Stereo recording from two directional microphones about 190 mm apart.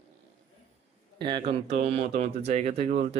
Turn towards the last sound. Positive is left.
turn(degrees=-40)  # may be behind; listen again after turning